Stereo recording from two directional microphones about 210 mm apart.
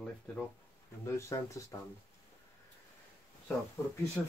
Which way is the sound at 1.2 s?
15° left (ahead or behind).